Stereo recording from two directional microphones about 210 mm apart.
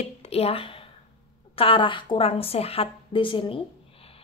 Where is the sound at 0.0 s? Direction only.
30° left (ahead or behind).